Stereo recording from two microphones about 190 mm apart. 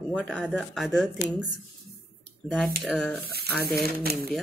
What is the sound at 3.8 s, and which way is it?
Speech, 55° right (ahead or behind).